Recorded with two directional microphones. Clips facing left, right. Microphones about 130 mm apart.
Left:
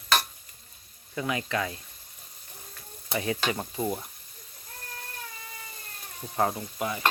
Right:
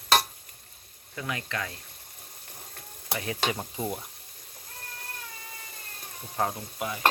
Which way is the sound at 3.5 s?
5° left (ahead or behind).